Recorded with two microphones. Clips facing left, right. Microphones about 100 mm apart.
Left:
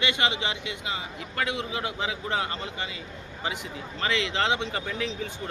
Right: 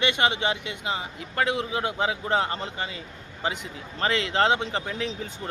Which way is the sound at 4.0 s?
40° right (ahead or behind).